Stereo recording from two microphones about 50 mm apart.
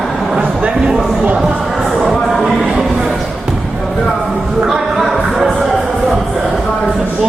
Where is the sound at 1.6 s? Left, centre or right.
Centre.